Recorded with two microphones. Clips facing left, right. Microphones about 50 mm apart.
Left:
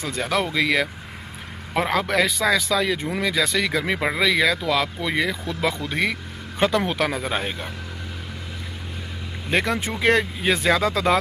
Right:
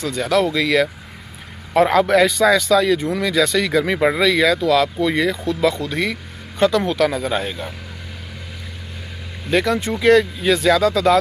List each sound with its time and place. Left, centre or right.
0.0 s speech: centre
1.7 s a man's voice: centre
9.5 s speech: left